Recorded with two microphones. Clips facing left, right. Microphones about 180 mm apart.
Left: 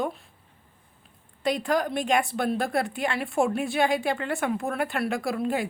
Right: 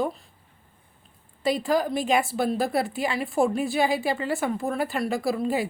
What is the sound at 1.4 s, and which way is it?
A woman's voice, 5° right (ahead or behind).